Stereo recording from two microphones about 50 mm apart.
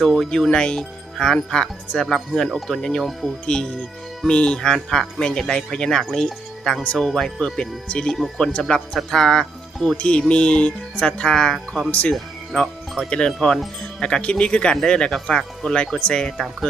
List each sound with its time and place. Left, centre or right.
0.0 s speech: centre
2.8 s speech: centre
3.1 s speech: centre
3.4 s speech: centre
8.1 s speech: centre
10.0 s speech: left
11.9 s speech: left
12.1 s music: centre
13.1 s speech: centre